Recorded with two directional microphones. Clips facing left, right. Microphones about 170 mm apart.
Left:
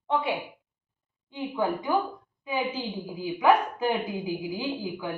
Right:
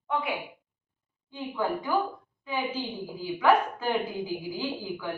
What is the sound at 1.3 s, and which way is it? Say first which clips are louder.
Speech: left 2 dB; 20° left (ahead or behind).